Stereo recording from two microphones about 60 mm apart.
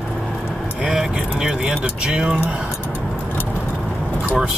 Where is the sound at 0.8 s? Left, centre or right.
Centre.